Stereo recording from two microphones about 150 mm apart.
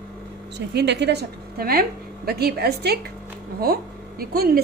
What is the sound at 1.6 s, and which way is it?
A woman's voice, 80° right.